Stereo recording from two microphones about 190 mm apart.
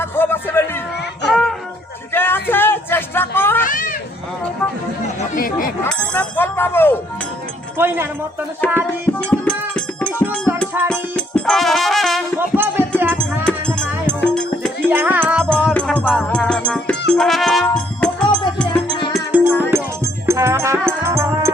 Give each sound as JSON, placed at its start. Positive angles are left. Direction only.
{"t": 0.0, "sound": "music", "side_deg": 10}
{"t": 1.3, "sound": "a sound", "side_deg": 0}
{"t": 3.6, "sound": "children playing", "side_deg": 45}
{"t": 5.3, "sound": "chatter", "side_deg": 45}
{"t": 5.8, "sound": "a sound", "side_deg": 10}
{"t": 7.8, "sound": "speech", "side_deg": -10}
{"t": 8.6, "sound": "music", "side_deg": 10}
{"t": 12.4, "sound": "music", "side_deg": -10}
{"t": 13.1, "sound": "music", "side_deg": 5}
{"t": 14.8, "sound": "music", "side_deg": -10}
{"t": 15.4, "sound": "music", "side_deg": 5}
{"t": 18.9, "sound": "music", "side_deg": 25}
{"t": 19.1, "sound": "music", "side_deg": -10}